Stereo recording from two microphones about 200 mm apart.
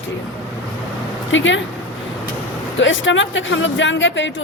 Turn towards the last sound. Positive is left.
turn(degrees=65)  # may be behind; listen again after turning